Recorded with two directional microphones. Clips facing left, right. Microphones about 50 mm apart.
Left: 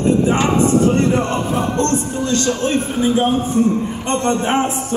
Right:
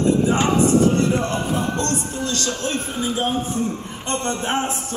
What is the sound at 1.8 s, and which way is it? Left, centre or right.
A man's voice, left.